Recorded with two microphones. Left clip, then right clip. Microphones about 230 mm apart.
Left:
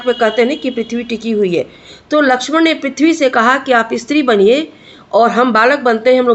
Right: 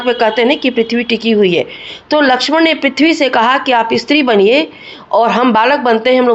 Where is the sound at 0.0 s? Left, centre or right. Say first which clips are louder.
Right 1 dB; centre.